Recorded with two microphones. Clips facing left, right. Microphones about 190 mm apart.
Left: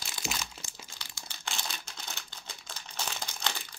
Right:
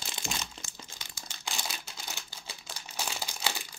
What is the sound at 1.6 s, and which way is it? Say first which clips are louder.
Crumpling: right 1 dB; 5° right (ahead or behind).